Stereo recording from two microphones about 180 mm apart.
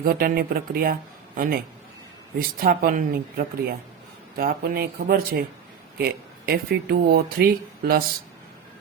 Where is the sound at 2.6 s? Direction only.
55° right (ahead or behind).